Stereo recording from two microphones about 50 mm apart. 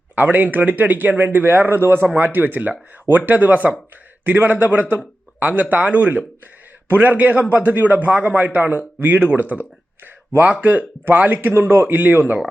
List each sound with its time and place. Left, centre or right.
0.2 s speech: right
2.1 s speech: right
11.6 s speech: right